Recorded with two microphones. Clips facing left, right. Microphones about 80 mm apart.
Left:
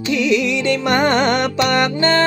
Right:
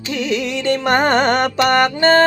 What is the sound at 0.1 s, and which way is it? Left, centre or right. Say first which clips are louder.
Music: left 3 dB; right.